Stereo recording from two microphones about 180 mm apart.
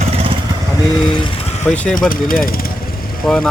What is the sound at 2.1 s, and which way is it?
Speech, 50° left (ahead or behind).